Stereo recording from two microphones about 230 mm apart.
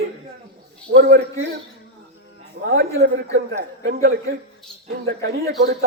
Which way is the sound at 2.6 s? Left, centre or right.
Right.